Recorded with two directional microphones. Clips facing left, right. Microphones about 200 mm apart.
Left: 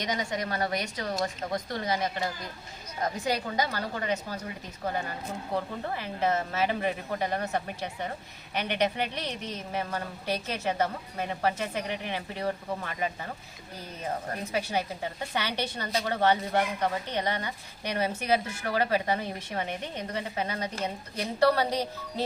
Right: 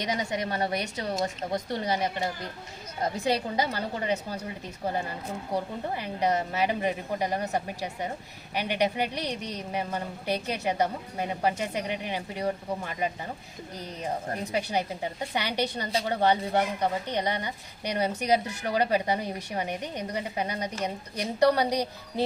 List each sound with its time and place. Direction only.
0.3 s a woman's voice: 25° right (ahead or behind)
3.0 s a woman's voice: 30° right (ahead or behind)
5.5 s speech: 15° right (ahead or behind)
15.4 s speech: 15° right (ahead or behind)